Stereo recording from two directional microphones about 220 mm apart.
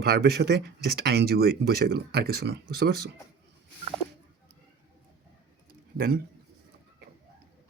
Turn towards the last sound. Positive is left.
turn(degrees=-40)  # may be behind; listen again after turning